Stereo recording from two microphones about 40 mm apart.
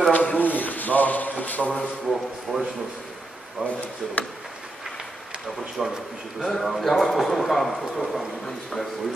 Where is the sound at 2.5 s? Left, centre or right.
Centre.